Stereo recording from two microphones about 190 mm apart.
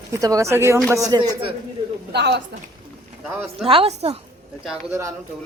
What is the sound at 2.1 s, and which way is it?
Speech, 65° right (ahead or behind).